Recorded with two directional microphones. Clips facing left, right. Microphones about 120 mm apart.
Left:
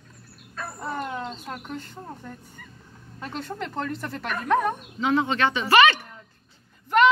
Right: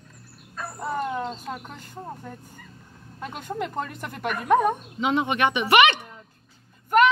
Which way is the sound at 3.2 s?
15° right (ahead or behind).